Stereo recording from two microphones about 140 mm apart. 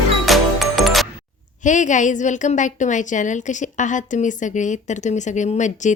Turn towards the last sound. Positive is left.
turn(degrees=60)  # may be behind; listen again after turning